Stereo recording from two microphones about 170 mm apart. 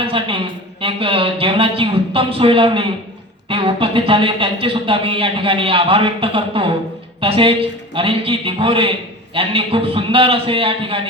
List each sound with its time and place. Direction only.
0.0 s speech: 30° right (ahead or behind)